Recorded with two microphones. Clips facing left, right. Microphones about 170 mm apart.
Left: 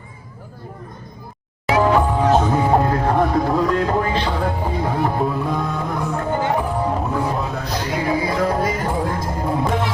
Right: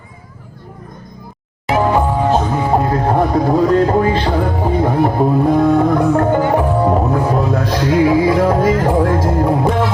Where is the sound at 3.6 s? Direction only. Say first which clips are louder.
Right 7 dB; 35° right (ahead or behind).